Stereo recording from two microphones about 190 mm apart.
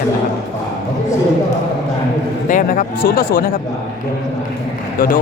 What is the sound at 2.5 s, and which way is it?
Speech, 45° left (ahead or behind).